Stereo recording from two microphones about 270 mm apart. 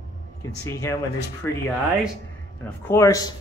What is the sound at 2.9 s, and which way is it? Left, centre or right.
Speech, centre.